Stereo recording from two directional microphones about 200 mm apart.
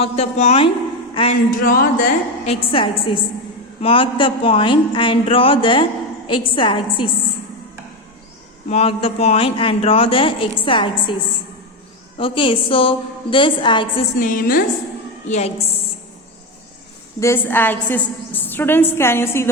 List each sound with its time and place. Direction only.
0.0 s a woman's voice: 30° left (ahead or behind)
1.5 s a woman's voice: 45° left (ahead or behind); by 7.1 s 25° left (ahead or behind)
8.7 s a woman's voice: 30° left (ahead or behind)
12.1 s a woman's voice: 25° left (ahead or behind)
14.2 s a woman's voice: 45° left (ahead or behind)
15.3 s a woman's voice: 30° left (ahead or behind)
17.2 s a woman's voice: 10° left (ahead or behind)